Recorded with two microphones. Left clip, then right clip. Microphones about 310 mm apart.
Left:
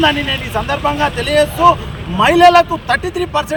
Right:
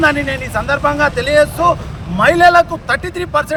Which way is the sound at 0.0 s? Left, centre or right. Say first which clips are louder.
Even; centre.